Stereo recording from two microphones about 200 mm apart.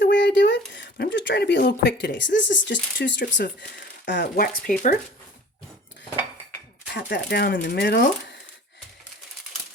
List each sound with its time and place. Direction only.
0.0 s speech: 65° left (ahead or behind)
4.7 s speech: 45° left (ahead or behind)
6.9 s speech: 50° left (ahead or behind)